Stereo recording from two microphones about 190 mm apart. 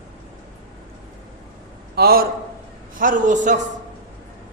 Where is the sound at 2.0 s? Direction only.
55° right (ahead or behind).